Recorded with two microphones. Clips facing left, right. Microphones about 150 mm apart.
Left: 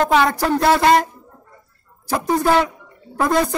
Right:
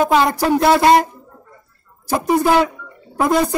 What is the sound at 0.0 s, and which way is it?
Speech, 10° right (ahead or behind).